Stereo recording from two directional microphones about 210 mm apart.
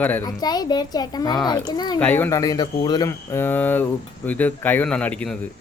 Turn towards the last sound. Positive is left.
turn(degrees=5)  # may be behind; listen again after turning